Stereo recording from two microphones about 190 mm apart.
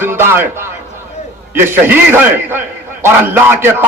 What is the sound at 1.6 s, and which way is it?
A man's voice, 10° right (ahead or behind).